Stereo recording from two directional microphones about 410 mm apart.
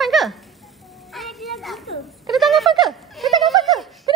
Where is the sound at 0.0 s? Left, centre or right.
Centre.